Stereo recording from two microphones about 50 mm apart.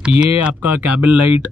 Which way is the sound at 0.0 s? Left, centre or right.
Right.